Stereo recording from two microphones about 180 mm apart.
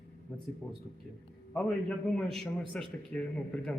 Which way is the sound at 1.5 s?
5° left (ahead or behind).